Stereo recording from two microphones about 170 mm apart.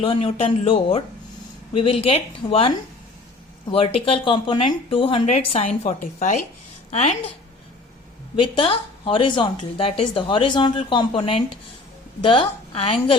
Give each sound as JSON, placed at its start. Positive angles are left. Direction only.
{"t": 0.0, "sound": "a woman's voice", "side_deg": 35}
{"t": 8.4, "sound": "a woman's voice", "side_deg": 30}